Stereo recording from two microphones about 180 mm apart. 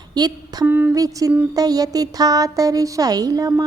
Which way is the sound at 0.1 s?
20° right (ahead or behind).